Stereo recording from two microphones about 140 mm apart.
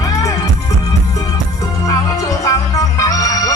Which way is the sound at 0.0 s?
25° left (ahead or behind).